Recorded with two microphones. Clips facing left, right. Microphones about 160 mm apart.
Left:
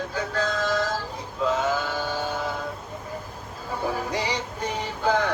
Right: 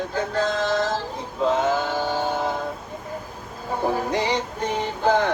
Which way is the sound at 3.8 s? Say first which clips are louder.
Right 4 dB; 50° right (ahead or behind).